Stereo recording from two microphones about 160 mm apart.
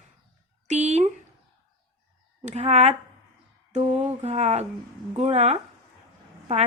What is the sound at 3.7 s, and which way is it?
Mantra, 40° right (ahead or behind).